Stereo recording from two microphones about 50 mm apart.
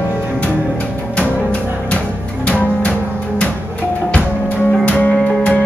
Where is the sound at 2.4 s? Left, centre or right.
Left.